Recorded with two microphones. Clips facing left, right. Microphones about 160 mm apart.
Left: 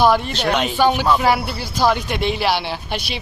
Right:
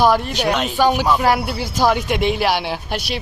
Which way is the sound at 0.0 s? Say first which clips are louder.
Even; 5° right (ahead or behind).